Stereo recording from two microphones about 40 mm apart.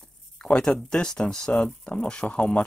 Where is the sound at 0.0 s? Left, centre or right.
Left.